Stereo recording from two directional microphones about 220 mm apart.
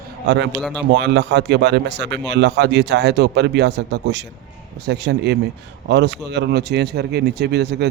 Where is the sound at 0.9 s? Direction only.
50° right (ahead or behind).